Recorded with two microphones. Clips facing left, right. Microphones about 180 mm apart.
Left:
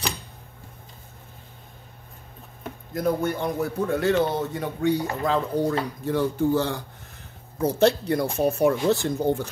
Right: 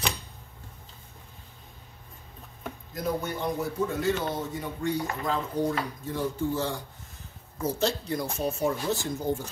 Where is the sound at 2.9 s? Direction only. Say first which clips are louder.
Left 6 dB; 55° left (ahead or behind).